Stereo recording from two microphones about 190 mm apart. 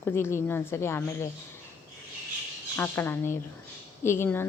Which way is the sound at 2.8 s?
10° left (ahead or behind).